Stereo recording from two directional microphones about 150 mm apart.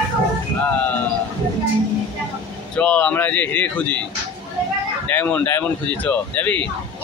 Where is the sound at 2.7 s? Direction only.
10° left (ahead or behind).